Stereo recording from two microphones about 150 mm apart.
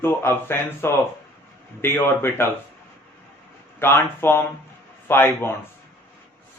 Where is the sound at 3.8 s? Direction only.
15° left (ahead or behind).